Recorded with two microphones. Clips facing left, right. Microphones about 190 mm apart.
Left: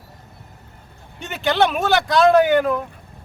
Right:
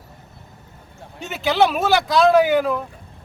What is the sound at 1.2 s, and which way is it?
A man's voice, centre (ahead or behind).